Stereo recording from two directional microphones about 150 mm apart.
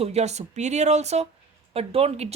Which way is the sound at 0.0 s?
45° right (ahead or behind).